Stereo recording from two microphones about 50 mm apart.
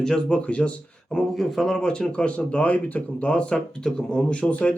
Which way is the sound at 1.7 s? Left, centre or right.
Centre.